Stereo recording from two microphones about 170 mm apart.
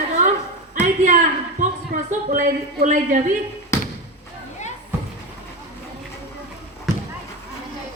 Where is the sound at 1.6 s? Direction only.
50° right (ahead or behind).